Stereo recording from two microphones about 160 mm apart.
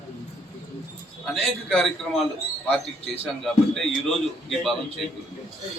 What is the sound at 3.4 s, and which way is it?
A man's voice, centre (ahead or behind).